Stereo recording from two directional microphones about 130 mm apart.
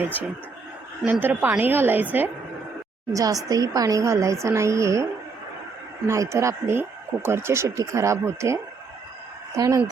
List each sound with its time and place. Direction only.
0.0 s a woman's voice: 15° right (ahead or behind)
3.1 s speech: 25° right (ahead or behind)
6.1 s speech: 20° right (ahead or behind)